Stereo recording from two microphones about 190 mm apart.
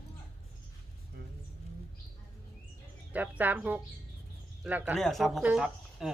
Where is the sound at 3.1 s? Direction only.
10° right (ahead or behind).